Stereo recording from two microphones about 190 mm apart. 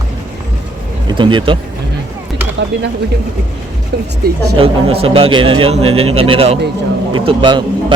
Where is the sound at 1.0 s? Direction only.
25° right (ahead or behind).